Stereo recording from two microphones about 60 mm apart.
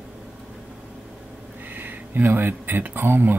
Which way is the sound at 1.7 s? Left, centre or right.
Right.